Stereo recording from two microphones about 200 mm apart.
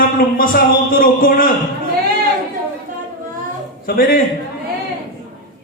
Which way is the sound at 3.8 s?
45° left (ahead or behind).